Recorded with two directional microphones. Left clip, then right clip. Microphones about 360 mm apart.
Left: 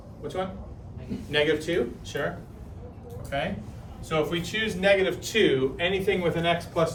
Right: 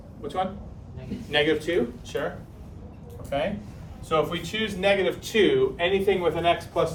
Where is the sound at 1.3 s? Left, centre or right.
Centre.